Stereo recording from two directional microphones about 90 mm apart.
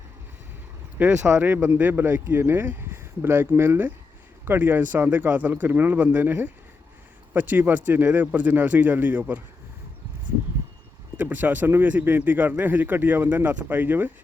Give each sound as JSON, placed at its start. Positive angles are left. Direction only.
{"t": 0.9, "sound": "speech", "side_deg": -15}
{"t": 11.2, "sound": "speech", "side_deg": -20}